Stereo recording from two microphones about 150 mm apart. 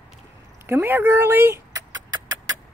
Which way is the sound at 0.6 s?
15° right (ahead or behind).